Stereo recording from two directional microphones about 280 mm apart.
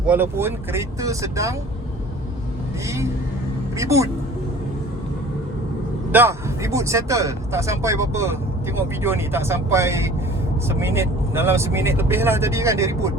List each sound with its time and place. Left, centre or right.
0.0 s speech: centre
2.8 s speech: centre
6.1 s speech: centre